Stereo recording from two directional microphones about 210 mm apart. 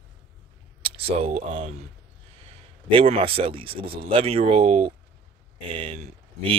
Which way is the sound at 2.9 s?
25° right (ahead or behind).